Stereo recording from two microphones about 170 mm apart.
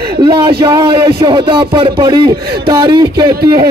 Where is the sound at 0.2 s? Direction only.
70° right (ahead or behind).